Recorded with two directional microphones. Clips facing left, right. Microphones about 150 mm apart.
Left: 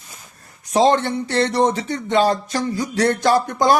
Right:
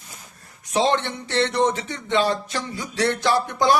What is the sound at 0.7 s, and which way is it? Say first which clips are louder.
Speech: left 5 dB; 40° left (ahead or behind).